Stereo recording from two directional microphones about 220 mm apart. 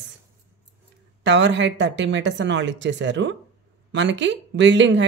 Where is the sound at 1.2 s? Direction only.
55° right (ahead or behind).